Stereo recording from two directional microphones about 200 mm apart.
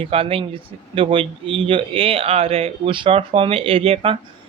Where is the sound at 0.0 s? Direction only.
30° right (ahead or behind).